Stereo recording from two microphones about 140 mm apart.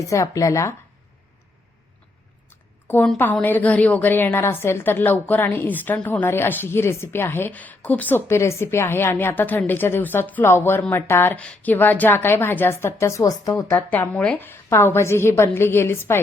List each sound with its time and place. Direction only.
0.0 s speech: 20° left (ahead or behind)
2.5 s a woman's voice: 15° left (ahead or behind)
13.7 s a woman's voice: 15° left (ahead or behind)